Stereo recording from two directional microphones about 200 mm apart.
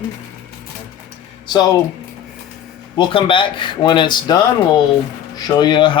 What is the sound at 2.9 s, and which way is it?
Speech, 25° left (ahead or behind).